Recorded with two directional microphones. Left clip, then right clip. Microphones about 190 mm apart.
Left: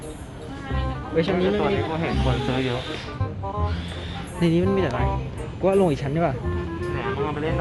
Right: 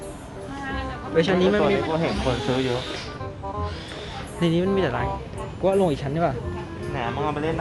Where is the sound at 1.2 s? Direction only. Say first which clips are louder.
Right 2 dB; 5° right (ahead or behind).